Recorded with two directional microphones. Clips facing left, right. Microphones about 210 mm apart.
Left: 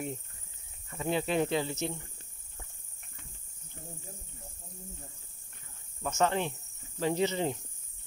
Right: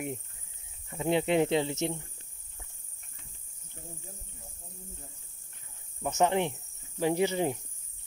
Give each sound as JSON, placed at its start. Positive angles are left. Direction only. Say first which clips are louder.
{"t": 0.8, "sound": "speech", "louder": "right 4 dB", "side_deg": -20}
{"t": 6.0, "sound": "speech", "louder": "right 3 dB", "side_deg": -15}